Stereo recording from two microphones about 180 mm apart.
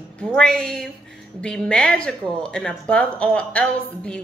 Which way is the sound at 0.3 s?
5° left (ahead or behind).